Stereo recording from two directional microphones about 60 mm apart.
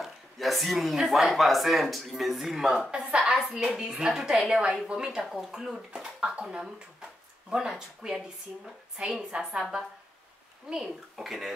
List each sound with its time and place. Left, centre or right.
0.0 s a sound: centre
0.9 s speech: centre
2.9 s a woman's voice: centre
3.2 s a woman's voice: centre
4.5 s a woman's voice: centre
5.2 s a woman's voice: centre